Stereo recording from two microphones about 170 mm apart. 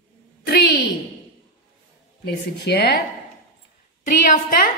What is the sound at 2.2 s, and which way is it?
Speech, 70° left (ahead or behind).